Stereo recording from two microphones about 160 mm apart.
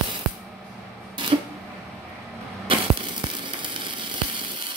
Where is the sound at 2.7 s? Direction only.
30° right (ahead or behind).